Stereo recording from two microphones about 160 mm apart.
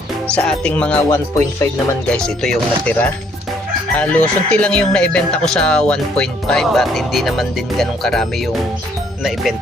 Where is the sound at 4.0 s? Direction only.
5° left (ahead or behind).